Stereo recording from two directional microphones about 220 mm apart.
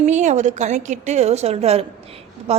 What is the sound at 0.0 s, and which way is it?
A woman's voice, 35° right (ahead or behind).